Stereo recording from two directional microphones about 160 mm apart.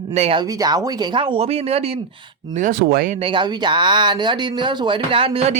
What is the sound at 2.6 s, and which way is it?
Speech, 60° right (ahead or behind).